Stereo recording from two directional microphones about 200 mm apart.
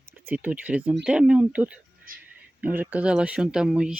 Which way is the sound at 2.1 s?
45° right (ahead or behind).